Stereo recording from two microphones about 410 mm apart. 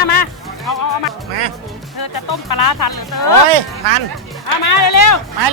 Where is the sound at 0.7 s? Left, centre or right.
Left.